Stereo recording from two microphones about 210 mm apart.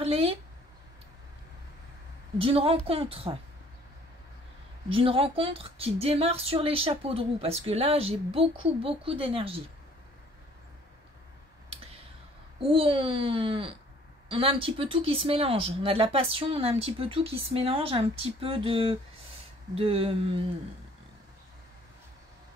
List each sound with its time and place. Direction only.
0.0 s a woman's voice: 25° right (ahead or behind)
2.3 s speech: 25° right (ahead or behind)
4.8 s speech: 25° right (ahead or behind)
12.5 s speech: 25° right (ahead or behind)